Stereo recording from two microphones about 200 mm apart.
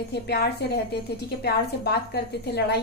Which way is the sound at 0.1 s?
55° left (ahead or behind).